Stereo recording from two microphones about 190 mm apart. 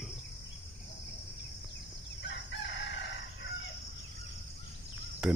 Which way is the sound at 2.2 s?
70° left (ahead or behind).